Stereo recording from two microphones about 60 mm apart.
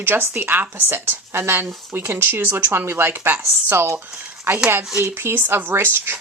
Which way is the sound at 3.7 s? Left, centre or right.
Right.